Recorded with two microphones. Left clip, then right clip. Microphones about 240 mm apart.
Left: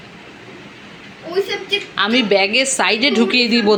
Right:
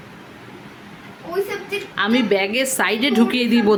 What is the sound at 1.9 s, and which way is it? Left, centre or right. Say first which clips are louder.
A woman's voice: left 3 dB; centre.